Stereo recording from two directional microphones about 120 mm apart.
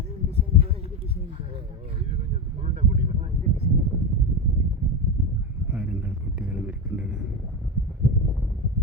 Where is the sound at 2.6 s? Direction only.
70° right (ahead or behind).